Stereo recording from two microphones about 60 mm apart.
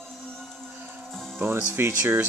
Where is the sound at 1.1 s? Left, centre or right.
Centre.